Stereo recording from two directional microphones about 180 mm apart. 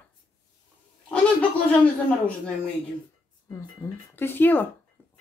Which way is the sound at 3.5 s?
15° left (ahead or behind).